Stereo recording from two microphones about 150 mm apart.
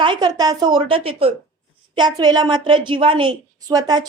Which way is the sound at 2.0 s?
30° right (ahead or behind).